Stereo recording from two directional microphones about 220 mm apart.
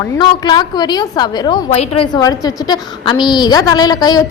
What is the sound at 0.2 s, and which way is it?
A woman's voice, 20° left (ahead or behind).